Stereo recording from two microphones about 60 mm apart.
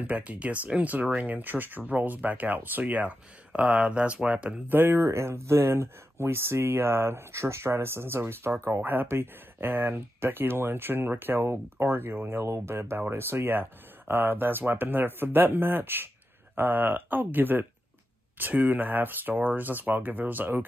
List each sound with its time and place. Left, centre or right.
0.0 s speech: right
4.6 s speech: right
12.4 s speech: right